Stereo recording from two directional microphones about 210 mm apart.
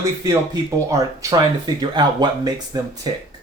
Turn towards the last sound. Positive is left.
turn(degrees=-20)  # may be behind; listen again after turning